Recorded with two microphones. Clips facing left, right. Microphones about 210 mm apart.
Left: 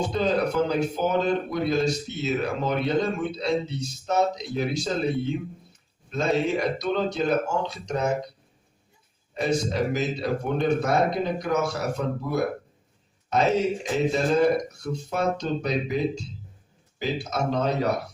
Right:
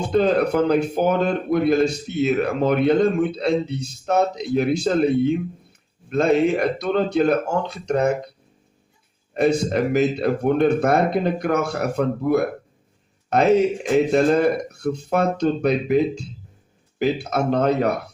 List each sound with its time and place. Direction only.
0.0 s a man's voice: 55° right (ahead or behind)
9.3 s a man's voice: 60° right (ahead or behind)